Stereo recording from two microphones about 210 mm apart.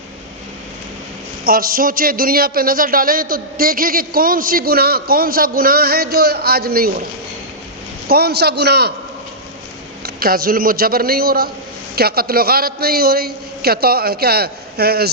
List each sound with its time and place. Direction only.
1.5 s a man's voice: 45° right (ahead or behind)
8.0 s a man's voice: 50° right (ahead or behind)
10.2 s a man's voice: 45° right (ahead or behind)